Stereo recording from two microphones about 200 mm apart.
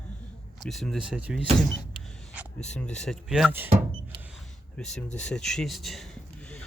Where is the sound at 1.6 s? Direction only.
5° left (ahead or behind).